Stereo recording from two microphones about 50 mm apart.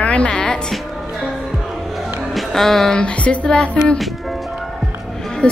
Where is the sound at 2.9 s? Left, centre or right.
Left.